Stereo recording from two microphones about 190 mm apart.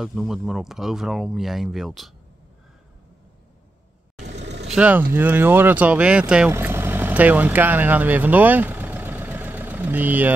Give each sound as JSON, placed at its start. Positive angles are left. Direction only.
{"t": 0.0, "sound": "speech", "side_deg": 0}
{"t": 4.2, "sound": "vehicle", "side_deg": -35}
{"t": 4.7, "sound": "speech", "side_deg": -5}